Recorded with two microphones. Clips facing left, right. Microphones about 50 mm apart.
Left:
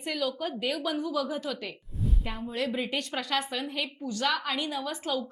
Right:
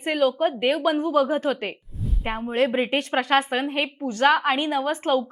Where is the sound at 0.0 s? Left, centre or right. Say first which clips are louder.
Right 10 dB; right.